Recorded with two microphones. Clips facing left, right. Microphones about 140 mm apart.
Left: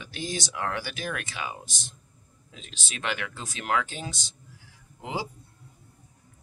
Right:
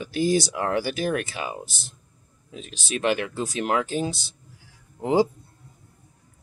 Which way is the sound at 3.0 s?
30° right (ahead or behind).